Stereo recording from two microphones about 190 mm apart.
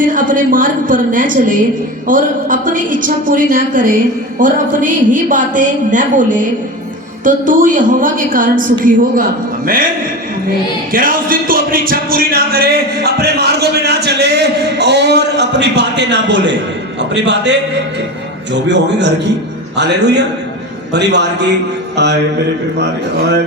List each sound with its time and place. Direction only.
0.0 s a woman's voice: 45° right (ahead or behind)
10.9 s music: 50° right (ahead or behind); by 16.6 s 70° right (ahead or behind)
17.0 s a man's voice: 65° right (ahead or behind)
18.7 s music: 65° right (ahead or behind)